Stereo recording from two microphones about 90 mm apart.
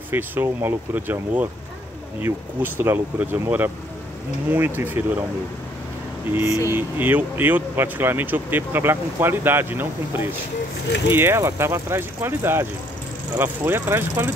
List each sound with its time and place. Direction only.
0.1 s speech: 25° right (ahead or behind)
2.2 s speech: 25° right (ahead or behind)
6.3 s speech: 30° right (ahead or behind)